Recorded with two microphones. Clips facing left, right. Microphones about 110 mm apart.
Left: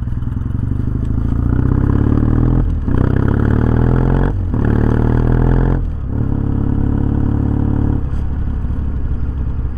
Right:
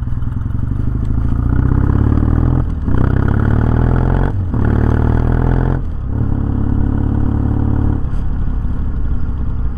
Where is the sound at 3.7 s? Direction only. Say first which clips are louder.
Left 1 dB; 5° left (ahead or behind).